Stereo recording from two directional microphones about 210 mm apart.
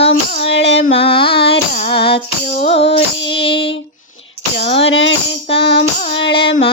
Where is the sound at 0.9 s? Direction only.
25° left (ahead or behind).